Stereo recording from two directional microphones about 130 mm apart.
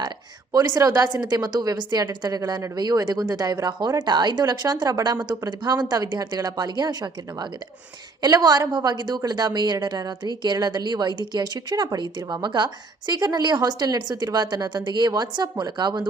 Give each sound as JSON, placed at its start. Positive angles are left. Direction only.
{"t": 0.5, "sound": "a woman's voice", "side_deg": -30}